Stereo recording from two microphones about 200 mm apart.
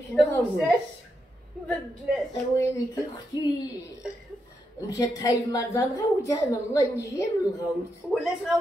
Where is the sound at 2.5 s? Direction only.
15° left (ahead or behind).